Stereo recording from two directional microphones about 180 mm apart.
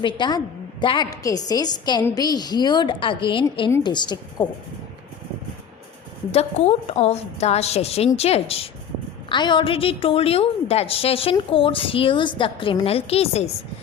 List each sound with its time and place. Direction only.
0.0 s a woman's voice: 25° left (ahead or behind)
6.3 s a woman's voice: 35° left (ahead or behind)